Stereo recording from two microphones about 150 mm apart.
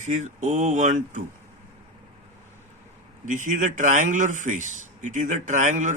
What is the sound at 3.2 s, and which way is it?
A man's voice, 60° right (ahead or behind).